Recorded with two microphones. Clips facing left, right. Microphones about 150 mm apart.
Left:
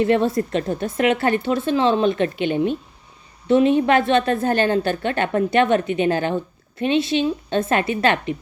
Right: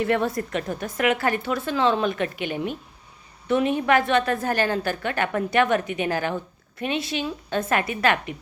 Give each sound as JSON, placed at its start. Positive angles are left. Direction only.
{"t": 0.0, "sound": "a woman's voice", "side_deg": 25}